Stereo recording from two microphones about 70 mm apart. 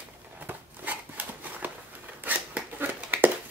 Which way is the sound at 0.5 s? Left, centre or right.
Right.